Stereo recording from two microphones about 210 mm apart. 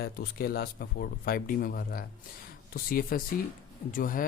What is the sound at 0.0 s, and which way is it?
Speech, 45° left (ahead or behind).